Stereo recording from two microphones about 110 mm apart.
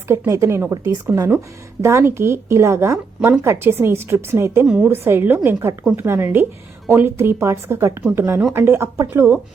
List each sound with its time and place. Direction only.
0.1 s a woman's voice: 25° right (ahead or behind)
1.1 s a woman's voice: 15° right (ahead or behind)
1.8 s a woman's voice: 25° right (ahead or behind)
4.6 s a woman's voice: 5° right (ahead or behind)
4.9 s a woman's voice: 20° right (ahead or behind)